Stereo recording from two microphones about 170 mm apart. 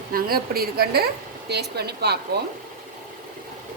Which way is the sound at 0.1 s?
60° right (ahead or behind).